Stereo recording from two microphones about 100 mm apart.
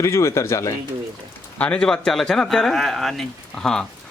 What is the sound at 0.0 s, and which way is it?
Speech, 30° left (ahead or behind).